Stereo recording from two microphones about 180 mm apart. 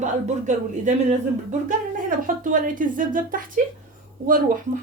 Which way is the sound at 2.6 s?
45° right (ahead or behind).